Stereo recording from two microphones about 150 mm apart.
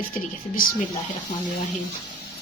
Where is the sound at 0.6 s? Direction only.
70° left (ahead or behind).